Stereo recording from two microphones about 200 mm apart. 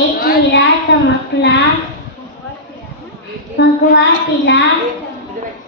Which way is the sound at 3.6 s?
60° left (ahead or behind).